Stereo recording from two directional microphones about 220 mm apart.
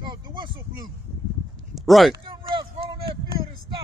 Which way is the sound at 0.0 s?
20° right (ahead or behind).